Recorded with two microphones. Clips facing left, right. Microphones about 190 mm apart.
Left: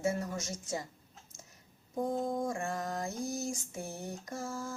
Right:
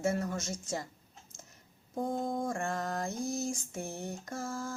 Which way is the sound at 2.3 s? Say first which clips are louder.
Right 1 dB; 15° left (ahead or behind).